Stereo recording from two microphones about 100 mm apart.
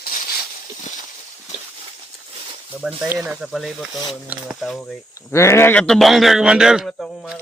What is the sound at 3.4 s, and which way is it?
A man's voice, 5° right (ahead or behind).